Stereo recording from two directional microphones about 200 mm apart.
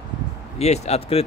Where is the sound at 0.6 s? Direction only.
30° left (ahead or behind).